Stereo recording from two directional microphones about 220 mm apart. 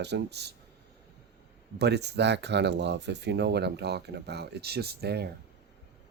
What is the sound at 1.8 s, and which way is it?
Speech, 50° right (ahead or behind).